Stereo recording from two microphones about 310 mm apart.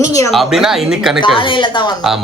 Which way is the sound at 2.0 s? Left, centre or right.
Centre.